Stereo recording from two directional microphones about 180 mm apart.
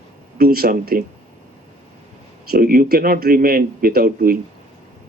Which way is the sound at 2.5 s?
55° right (ahead or behind).